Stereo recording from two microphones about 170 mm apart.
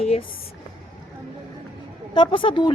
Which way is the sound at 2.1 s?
30° left (ahead or behind).